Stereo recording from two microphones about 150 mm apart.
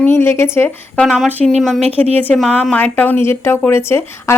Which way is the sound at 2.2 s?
5° left (ahead or behind).